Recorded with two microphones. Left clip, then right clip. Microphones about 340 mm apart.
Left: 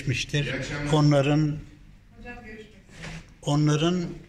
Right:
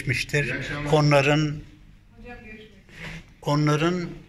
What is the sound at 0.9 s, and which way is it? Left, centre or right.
Speech, right.